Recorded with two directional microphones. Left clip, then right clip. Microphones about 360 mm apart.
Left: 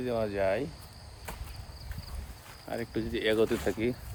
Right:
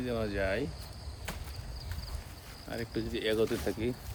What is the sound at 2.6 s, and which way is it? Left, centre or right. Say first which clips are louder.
Speech: left 3 dB; centre.